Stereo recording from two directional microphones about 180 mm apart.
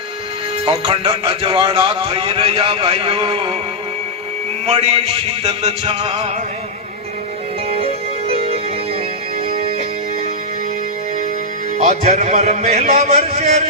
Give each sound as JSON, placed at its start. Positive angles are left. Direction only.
{"t": 0.7, "sound": "a man's voice", "side_deg": -30}
{"t": 4.6, "sound": "a man's voice", "side_deg": -35}
{"t": 7.7, "sound": "music", "side_deg": -35}
{"t": 11.8, "sound": "a man's voice", "side_deg": -35}